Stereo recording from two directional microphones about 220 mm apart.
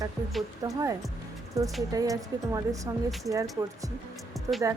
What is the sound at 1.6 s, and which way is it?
A woman's voice, 15° right (ahead or behind).